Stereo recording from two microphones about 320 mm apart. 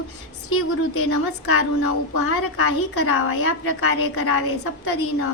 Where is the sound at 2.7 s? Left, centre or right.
Left.